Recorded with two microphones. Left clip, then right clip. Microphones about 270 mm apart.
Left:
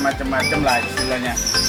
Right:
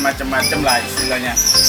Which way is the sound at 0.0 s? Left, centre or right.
Centre.